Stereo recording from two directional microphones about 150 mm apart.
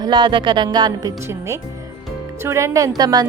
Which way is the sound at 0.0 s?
30° right (ahead or behind).